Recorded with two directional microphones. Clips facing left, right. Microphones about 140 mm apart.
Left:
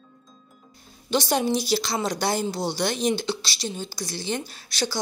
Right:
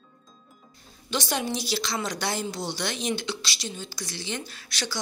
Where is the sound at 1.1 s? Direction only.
35° left (ahead or behind).